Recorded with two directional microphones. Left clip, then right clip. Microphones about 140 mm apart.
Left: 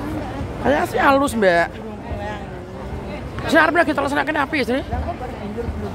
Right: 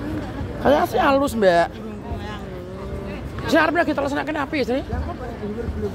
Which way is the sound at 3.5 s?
10° left (ahead or behind).